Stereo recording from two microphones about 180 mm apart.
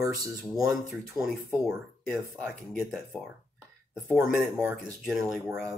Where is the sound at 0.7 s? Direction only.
Centre (ahead or behind).